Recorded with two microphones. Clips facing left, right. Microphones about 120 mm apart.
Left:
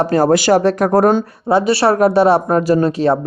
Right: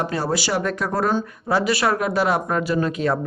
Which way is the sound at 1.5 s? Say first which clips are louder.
Left 7 dB; 25° left (ahead or behind).